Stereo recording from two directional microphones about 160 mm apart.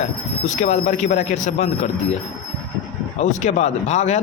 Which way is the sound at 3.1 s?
45° left (ahead or behind).